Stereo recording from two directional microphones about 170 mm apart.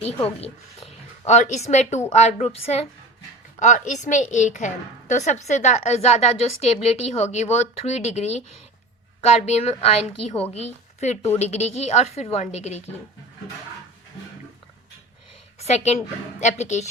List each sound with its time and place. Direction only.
0.4 s a woman's voice: 35° left (ahead or behind)
15.5 s a woman's voice: 40° left (ahead or behind)